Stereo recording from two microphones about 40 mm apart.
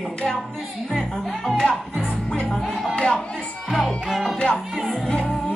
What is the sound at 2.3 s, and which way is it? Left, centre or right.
Music, left.